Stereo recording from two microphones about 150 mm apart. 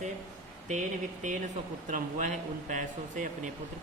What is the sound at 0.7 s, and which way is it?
Speech, 55° right (ahead or behind).